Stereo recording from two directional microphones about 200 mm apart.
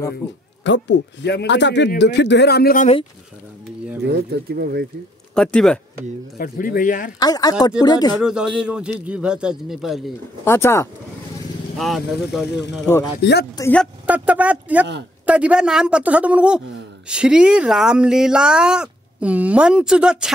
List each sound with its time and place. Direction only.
0.7 s a man's voice: 60° left (ahead or behind); by 2.9 s 45° left (ahead or behind)
4.0 s speech: 55° right (ahead or behind)
5.3 s speech: 5° left (ahead or behind)
6.3 s a man's voice: 45° left (ahead or behind)
7.2 s speech: 20° left (ahead or behind)
8.2 s speech: 5° right (ahead or behind)
10.4 s speech: 10° left (ahead or behind)
11.8 s speech: centre (ahead or behind)
12.4 s a man's voice: 60° left (ahead or behind)
13.6 s speech: 10° left (ahead or behind)
14.0 s speech: 5° right (ahead or behind)